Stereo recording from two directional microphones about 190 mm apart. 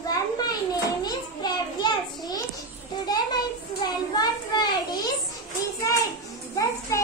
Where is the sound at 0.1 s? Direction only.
20° left (ahead or behind).